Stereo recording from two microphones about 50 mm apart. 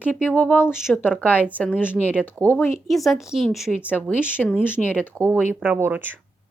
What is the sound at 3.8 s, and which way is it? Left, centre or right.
Speech, left.